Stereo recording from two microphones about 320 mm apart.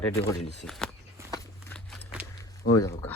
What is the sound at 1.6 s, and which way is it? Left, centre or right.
Walk, centre.